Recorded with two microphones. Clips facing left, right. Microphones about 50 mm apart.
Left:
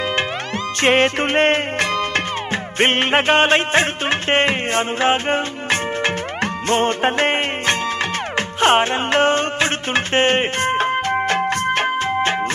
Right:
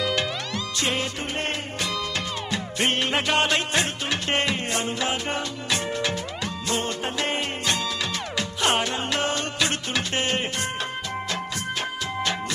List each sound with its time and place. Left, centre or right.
0.7 s music: left